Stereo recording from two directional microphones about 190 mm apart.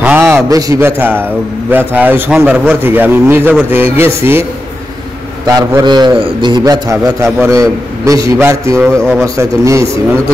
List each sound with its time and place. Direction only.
0.0 s a man's voice: 10° right (ahead or behind)
5.5 s a man's voice: 20° right (ahead or behind)